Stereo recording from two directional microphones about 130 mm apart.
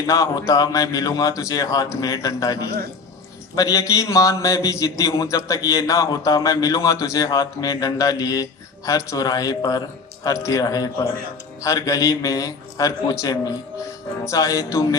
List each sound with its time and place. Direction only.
0.0 s a man's voice: 25° left (ahead or behind)